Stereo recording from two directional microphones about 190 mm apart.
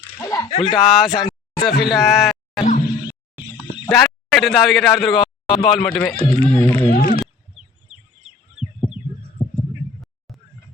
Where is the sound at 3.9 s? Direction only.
Centre (ahead or behind).